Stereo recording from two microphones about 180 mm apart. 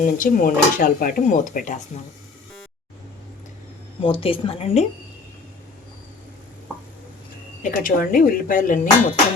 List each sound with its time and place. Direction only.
0.0 s speech: 50° left (ahead or behind)
4.0 s a woman's voice: 30° left (ahead or behind)
7.6 s speech: 50° left (ahead or behind)